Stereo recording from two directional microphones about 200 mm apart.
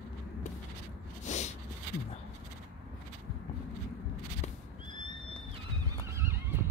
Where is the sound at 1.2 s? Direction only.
35° left (ahead or behind).